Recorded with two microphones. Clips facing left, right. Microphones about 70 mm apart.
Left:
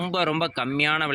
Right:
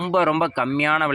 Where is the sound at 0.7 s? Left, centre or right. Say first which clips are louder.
Right 4 dB; right.